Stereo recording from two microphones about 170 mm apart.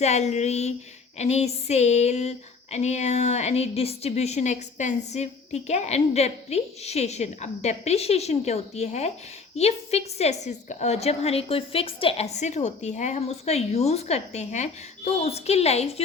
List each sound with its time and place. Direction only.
0.0 s female singing: 40° left (ahead or behind)